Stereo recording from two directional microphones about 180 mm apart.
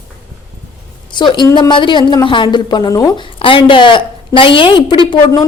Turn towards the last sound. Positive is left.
turn(degrees=25)  # may be behind; listen again after turning